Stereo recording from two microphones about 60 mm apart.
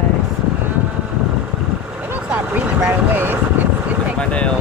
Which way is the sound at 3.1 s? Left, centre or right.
Right.